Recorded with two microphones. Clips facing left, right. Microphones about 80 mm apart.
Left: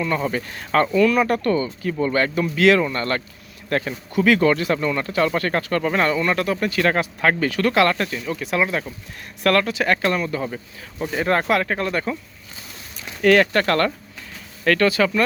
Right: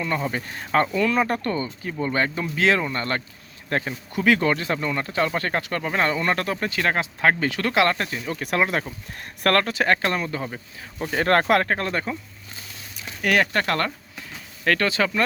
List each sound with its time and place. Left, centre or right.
0.3 s speech: right
6.1 s speech: right
8.4 s speech: right
11.1 s speech: right
11.8 s speech: right
13.2 s speech: centre